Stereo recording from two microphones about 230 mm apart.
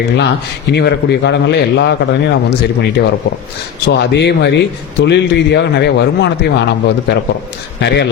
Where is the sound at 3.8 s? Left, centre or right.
Left.